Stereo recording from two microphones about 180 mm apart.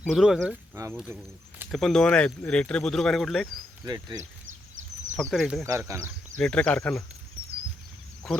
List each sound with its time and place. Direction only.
0.1 s speech: centre (ahead or behind)
1.7 s speech: centre (ahead or behind)
3.8 s speech: 20° right (ahead or behind)
5.1 s speech: centre (ahead or behind)
5.6 s speech: 20° right (ahead or behind)
6.4 s speech: 5° left (ahead or behind)
8.2 s speech: centre (ahead or behind)